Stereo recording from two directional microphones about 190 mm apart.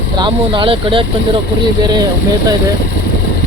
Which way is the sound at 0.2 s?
25° right (ahead or behind).